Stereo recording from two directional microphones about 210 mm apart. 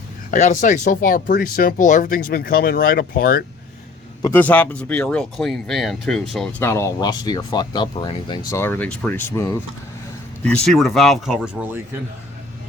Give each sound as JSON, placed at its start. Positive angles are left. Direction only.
{"t": 0.3, "sound": "speech", "side_deg": 35}
{"t": 4.2, "sound": "speech", "side_deg": 10}
{"t": 6.6, "sound": "speech", "side_deg": 15}
{"t": 8.4, "sound": "speech", "side_deg": 10}
{"t": 10.4, "sound": "speech", "side_deg": 5}